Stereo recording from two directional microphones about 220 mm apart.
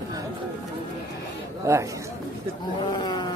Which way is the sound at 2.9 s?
20° left (ahead or behind).